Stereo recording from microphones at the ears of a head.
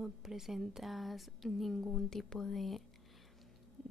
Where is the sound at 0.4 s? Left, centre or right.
Centre.